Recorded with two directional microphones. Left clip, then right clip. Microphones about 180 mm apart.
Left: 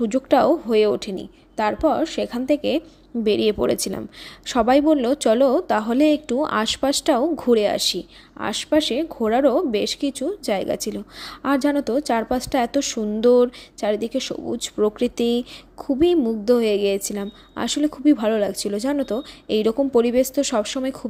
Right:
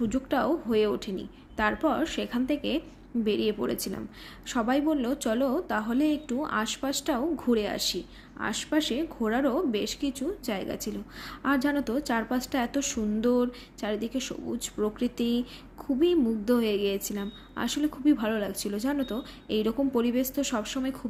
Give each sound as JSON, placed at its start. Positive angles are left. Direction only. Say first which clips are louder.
{"t": 0.0, "sound": "a woman's voice", "louder": "left 11 dB", "side_deg": 40}